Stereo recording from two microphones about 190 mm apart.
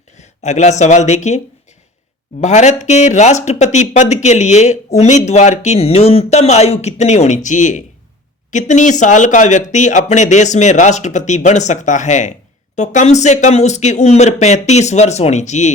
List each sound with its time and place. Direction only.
0.2 s speech: 35° left (ahead or behind)
2.4 s speech: 40° left (ahead or behind)